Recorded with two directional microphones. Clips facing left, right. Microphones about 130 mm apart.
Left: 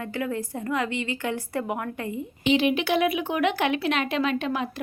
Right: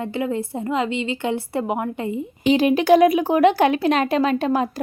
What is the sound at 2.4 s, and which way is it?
Speech, 40° right (ahead or behind).